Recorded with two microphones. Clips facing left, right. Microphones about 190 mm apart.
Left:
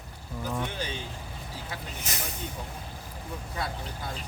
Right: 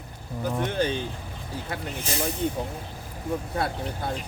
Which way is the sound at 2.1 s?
30° right (ahead or behind).